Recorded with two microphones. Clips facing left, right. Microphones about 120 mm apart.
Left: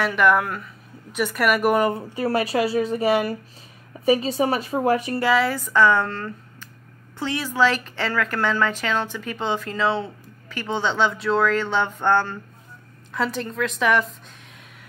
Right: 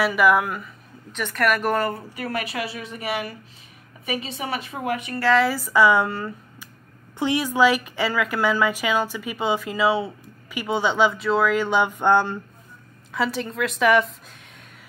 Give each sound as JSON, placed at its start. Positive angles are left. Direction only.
{"t": 0.0, "sound": "a woman's voice", "side_deg": -5}
{"t": 1.1, "sound": "a woman's voice", "side_deg": 5}
{"t": 5.3, "sound": "a woman's voice", "side_deg": 0}
{"t": 13.1, "sound": "a woman's voice", "side_deg": 0}